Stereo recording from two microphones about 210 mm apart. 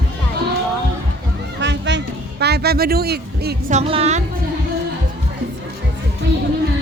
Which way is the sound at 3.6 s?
30° right (ahead or behind).